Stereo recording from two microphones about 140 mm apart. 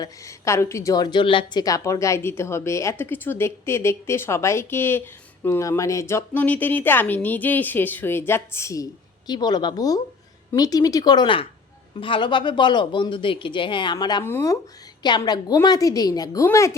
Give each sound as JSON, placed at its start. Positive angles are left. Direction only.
{"t": 0.0, "sound": "speech", "side_deg": 20}
{"t": 1.6, "sound": "speech", "side_deg": 25}
{"t": 14.3, "sound": "speech", "side_deg": 20}
{"t": 15.0, "sound": "speech", "side_deg": 30}